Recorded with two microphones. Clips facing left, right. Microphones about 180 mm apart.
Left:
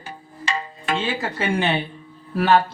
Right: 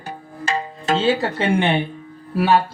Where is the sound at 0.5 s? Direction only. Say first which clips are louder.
Right 5 dB; 35° right (ahead or behind).